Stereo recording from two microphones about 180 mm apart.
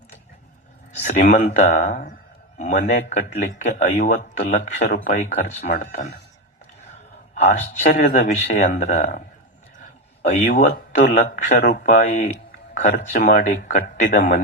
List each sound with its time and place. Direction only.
1.0 s a man's voice: 40° left (ahead or behind)
7.3 s a man's voice: 40° left (ahead or behind)
10.3 s a man's voice: 40° left (ahead or behind)